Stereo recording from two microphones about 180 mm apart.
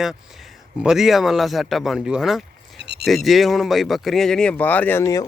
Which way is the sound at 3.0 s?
Centre (ahead or behind).